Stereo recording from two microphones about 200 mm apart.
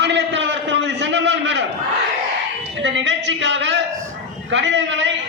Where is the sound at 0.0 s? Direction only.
60° right (ahead or behind).